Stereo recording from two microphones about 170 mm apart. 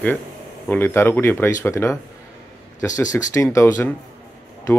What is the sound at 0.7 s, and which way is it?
Speech, 15° left (ahead or behind).